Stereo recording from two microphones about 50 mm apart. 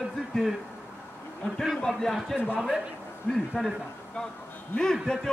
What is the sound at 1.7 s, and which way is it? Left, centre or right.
A man's voice, centre.